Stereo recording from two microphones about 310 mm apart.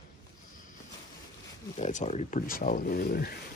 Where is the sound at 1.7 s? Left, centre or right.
Left.